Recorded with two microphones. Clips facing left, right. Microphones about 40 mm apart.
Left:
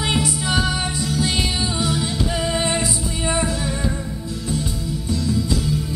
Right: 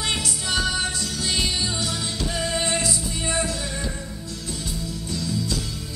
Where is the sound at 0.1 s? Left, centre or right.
Centre.